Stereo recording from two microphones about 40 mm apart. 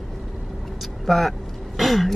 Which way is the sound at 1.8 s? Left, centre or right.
Centre.